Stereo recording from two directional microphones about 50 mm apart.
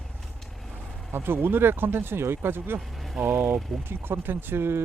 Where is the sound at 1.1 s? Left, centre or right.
Right.